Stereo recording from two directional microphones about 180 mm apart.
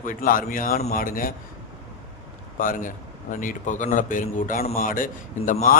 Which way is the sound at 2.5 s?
50° left (ahead or behind).